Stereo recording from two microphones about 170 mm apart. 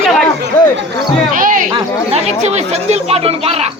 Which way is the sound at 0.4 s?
80° right.